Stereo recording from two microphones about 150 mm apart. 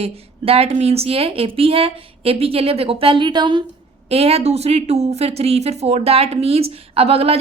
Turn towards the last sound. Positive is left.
turn(degrees=-40)  # may be behind; listen again after turning